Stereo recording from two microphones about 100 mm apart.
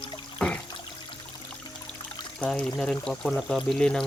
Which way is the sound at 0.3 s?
10° left (ahead or behind).